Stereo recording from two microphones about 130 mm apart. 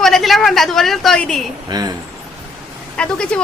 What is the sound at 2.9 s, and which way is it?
Speech, 5° left (ahead or behind).